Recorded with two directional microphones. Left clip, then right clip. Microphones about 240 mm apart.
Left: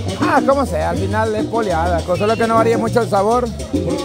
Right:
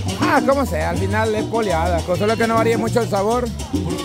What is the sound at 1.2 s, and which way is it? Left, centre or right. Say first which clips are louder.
Speech: left 1 dB; centre.